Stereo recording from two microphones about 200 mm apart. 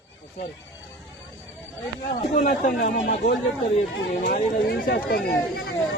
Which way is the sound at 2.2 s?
35° left (ahead or behind).